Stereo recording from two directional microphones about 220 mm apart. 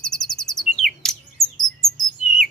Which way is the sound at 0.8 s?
Centre (ahead or behind).